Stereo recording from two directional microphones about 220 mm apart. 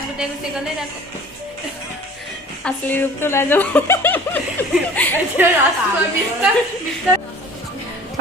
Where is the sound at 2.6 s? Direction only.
10° left (ahead or behind).